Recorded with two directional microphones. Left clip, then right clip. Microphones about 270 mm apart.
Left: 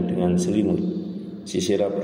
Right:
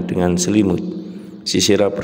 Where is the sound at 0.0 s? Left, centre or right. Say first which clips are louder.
Right 5 dB; right.